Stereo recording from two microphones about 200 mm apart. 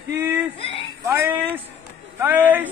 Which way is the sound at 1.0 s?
10° right (ahead or behind).